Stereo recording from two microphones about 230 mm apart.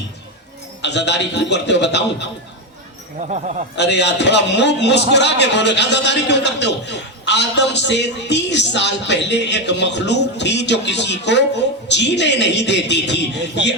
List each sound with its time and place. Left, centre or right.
0.8 s a man's voice: left
3.2 s speech: right
3.8 s a man's voice: left